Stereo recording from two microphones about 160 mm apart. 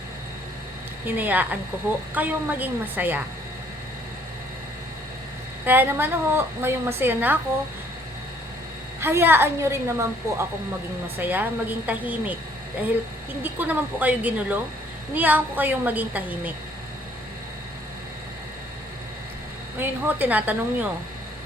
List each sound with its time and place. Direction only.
1.0 s a woman's voice: 10° right (ahead or behind)
5.6 s a woman's voice: 10° right (ahead or behind)
9.0 s a woman's voice: 15° right (ahead or behind)
13.4 s a woman's voice: 10° right (ahead or behind)
19.8 s a woman's voice: 10° right (ahead or behind)